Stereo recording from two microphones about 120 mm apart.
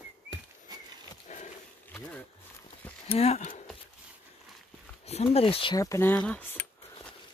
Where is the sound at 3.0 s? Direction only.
60° left (ahead or behind); by 3.6 s 80° left.